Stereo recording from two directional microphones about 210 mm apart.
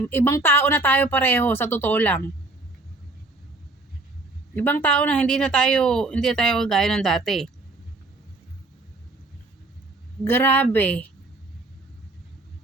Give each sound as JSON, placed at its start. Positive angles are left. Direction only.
{"t": 0.0, "sound": "a woman's voice", "side_deg": 10}
{"t": 4.5, "sound": "speech", "side_deg": 10}
{"t": 10.2, "sound": "a woman's voice", "side_deg": 10}